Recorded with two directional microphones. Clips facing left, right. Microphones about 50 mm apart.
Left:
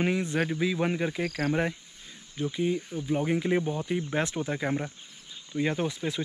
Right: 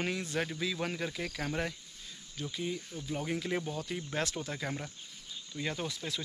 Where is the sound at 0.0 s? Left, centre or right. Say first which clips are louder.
Left 7 dB; left.